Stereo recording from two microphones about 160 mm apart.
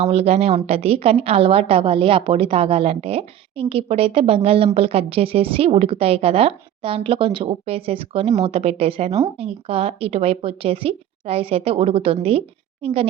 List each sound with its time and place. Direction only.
0.0 s a woman's voice: 40° right (ahead or behind)